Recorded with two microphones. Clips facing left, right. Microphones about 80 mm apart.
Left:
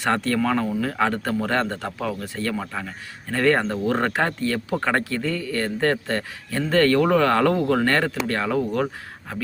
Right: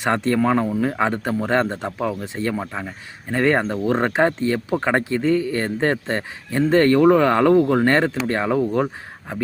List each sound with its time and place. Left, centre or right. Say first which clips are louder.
0.0 s speech: right 3 dB; right
7.9 s speech: right 3 dB; right